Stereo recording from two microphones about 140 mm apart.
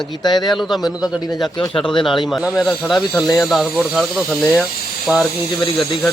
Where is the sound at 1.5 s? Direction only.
35° left (ahead or behind).